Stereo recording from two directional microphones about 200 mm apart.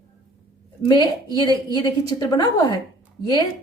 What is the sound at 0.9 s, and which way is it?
A woman's voice, 20° left (ahead or behind).